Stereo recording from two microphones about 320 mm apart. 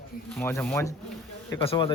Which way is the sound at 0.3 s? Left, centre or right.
Centre.